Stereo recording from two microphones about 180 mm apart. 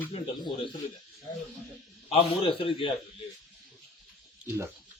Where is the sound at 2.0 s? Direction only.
35° left (ahead or behind).